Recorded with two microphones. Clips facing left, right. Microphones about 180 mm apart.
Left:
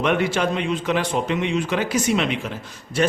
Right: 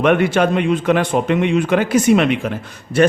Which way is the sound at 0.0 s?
55° right (ahead or behind).